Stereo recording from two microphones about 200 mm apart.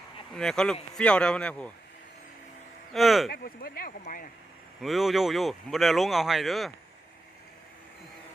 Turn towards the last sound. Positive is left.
turn(degrees=0)  # may be behind; listen again after turning